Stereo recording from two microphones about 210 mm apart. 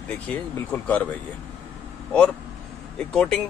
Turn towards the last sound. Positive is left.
turn(degrees=5)  # may be behind; listen again after turning